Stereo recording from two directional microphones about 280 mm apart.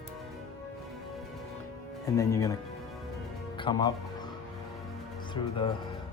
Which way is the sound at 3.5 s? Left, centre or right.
Centre.